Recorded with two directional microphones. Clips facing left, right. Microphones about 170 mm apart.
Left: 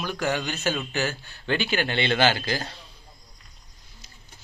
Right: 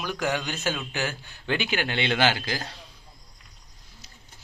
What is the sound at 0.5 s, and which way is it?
Speech, 10° left (ahead or behind).